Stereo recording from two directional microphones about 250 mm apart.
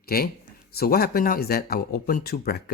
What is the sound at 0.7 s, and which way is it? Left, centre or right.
Speech, left.